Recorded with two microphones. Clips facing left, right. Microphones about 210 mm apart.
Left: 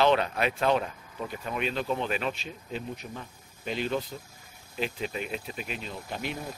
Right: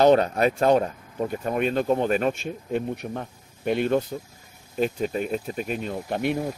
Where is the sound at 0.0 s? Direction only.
45° right (ahead or behind).